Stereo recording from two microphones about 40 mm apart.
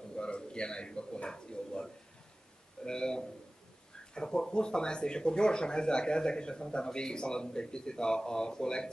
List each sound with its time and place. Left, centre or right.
0.1 s a man's voice: left